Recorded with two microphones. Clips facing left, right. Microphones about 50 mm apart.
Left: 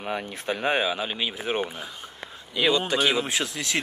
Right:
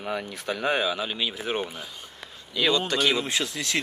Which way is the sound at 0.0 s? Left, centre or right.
Left.